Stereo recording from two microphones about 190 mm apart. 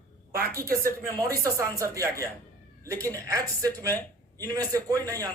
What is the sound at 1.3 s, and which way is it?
A woman's voice, 20° right (ahead or behind).